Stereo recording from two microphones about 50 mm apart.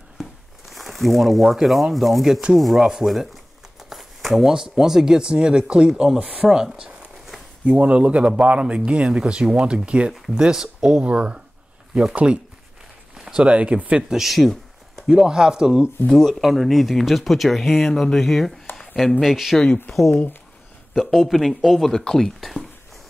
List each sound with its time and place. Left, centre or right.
0.2 s speech: centre
3.9 s a sound: centre
4.6 s a man's voice: centre
6.4 s speech: centre
7.6 s speech: right
7.9 s a man's voice: right
14.0 s a sound: centre
15.0 s speech: centre
16.1 s speech: centre
20.9 s speech: centre